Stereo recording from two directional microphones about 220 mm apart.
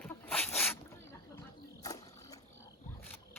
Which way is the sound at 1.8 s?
15° left (ahead or behind).